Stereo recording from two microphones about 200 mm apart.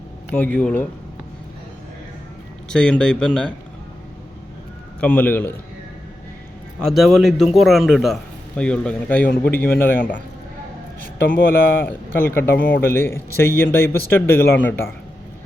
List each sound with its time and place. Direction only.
0.3 s speech: 10° left (ahead or behind)
2.6 s a man's voice: 5° left (ahead or behind)
4.9 s speech: 10° left (ahead or behind)
6.8 s a man's voice: centre (ahead or behind)
11.3 s speech: 45° left (ahead or behind)
11.7 s speech: 10° left (ahead or behind)